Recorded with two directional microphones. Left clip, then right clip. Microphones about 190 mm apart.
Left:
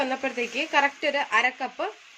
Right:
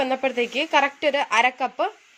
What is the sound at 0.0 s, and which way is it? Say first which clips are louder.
A woman's voice: right 5 dB; 45° right (ahead or behind).